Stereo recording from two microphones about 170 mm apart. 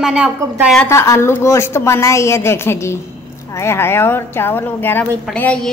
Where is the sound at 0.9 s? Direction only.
15° left (ahead or behind).